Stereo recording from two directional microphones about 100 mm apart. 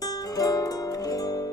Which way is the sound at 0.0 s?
40° left (ahead or behind).